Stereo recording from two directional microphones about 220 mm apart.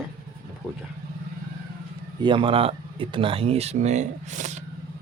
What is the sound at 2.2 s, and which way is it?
Speech, 20° right (ahead or behind).